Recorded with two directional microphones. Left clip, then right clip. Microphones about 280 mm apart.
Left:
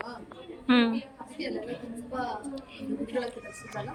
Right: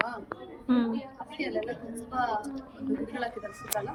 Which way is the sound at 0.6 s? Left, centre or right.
Centre.